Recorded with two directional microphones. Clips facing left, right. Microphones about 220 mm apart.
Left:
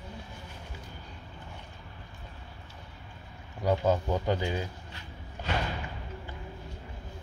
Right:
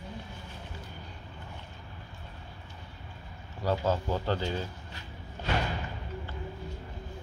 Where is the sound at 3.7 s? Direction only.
15° left (ahead or behind).